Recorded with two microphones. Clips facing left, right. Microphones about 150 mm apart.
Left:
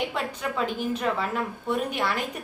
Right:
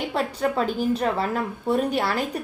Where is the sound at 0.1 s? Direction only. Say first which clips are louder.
Right 6 dB; 35° right (ahead or behind).